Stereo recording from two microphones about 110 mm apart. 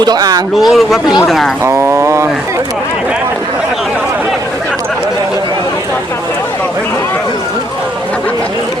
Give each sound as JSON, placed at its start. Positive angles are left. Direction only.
{"t": 0.0, "sound": "speech", "side_deg": -35}
{"t": 0.5, "sound": "speech", "side_deg": 0}
{"t": 1.6, "sound": "speech", "side_deg": -25}